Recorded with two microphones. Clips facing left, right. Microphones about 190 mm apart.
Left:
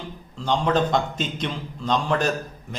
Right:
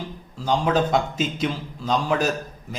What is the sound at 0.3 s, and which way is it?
A man's voice, 5° right (ahead or behind).